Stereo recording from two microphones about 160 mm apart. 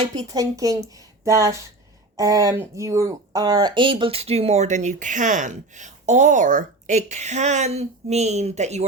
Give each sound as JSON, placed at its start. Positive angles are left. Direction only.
{"t": 0.2, "sound": "speech", "side_deg": -25}